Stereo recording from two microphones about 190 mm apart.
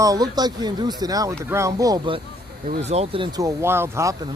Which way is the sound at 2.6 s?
35° right (ahead or behind).